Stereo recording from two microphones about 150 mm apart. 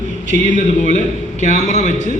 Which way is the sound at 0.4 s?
55° left (ahead or behind).